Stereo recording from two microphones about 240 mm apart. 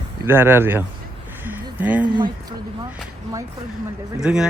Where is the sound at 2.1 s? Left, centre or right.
Centre.